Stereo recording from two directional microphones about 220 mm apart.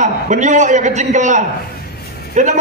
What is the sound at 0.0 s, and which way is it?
A man's voice, 35° right (ahead or behind).